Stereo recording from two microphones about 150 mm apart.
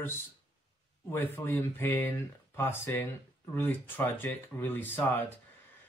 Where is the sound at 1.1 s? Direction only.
15° left (ahead or behind).